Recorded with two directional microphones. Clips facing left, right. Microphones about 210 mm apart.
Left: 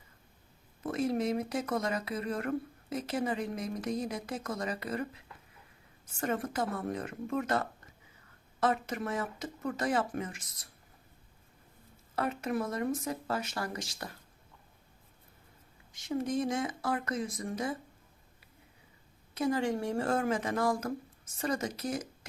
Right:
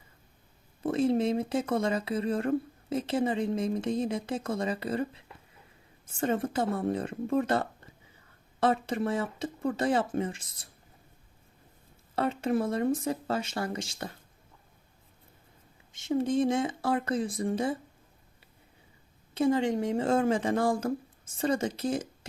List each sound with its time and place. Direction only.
0.8 s speech: 30° right (ahead or behind)
12.1 s speech: 30° right (ahead or behind)
15.9 s speech: 25° right (ahead or behind)
19.3 s speech: 25° right (ahead or behind)